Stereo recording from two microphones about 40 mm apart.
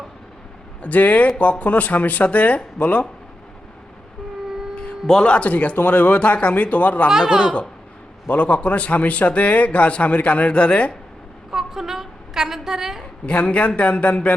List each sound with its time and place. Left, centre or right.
0.8 s a man's voice: left
4.7 s a sound: left
5.1 s a man's voice: left
5.4 s a man's voice: left
7.1 s speech: centre
8.3 s a man's voice: left
11.5 s a woman's voice: centre
13.2 s a man's voice: left